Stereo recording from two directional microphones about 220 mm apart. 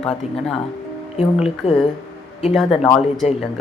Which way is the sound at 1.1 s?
30° left (ahead or behind).